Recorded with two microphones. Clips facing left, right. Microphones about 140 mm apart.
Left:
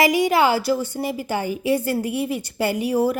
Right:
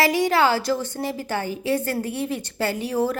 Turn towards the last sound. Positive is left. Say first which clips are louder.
# left 3 dB
turn(degrees=10)  # may be behind; listen again after turning